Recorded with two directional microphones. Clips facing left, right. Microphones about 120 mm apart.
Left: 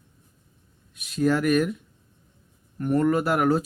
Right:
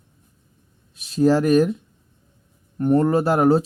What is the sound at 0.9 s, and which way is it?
Speech, 30° right (ahead or behind).